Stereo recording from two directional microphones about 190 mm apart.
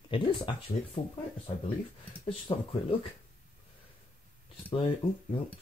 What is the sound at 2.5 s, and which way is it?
Speech, 20° left (ahead or behind).